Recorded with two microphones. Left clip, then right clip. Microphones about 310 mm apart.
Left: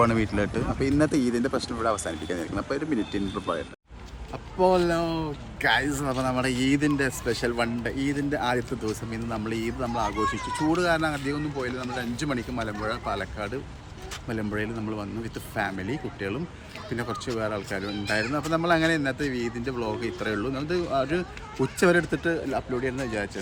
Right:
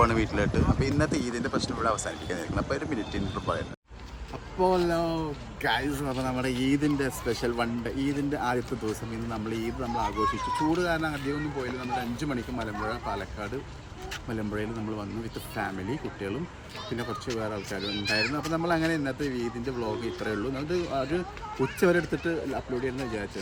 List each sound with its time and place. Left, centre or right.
0.0 s speech: centre
4.5 s a man's voice: centre
10.2 s speech: centre
10.8 s a man's voice: centre
12.1 s a man's voice: centre